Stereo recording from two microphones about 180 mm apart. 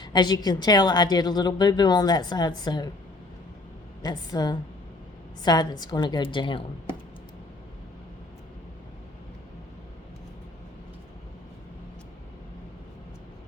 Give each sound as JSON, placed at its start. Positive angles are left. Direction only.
{"t": 0.0, "sound": "a woman's voice", "side_deg": 25}
{"t": 4.0, "sound": "a woman's voice", "side_deg": 20}